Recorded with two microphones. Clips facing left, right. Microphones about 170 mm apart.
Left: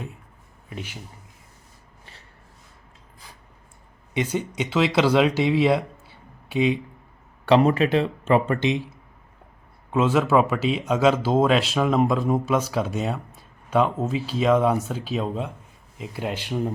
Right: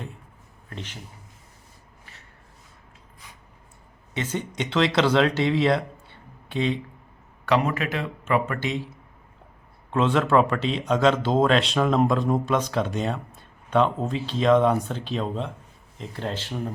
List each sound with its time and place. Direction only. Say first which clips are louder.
0.7 s speech: left 2 dB; 10° left (ahead or behind)
4.1 s speech: left 4 dB; 10° left (ahead or behind)
7.4 s speech: left 6 dB; 30° left (ahead or behind)
9.9 s speech: left 1 dB; 5° left (ahead or behind)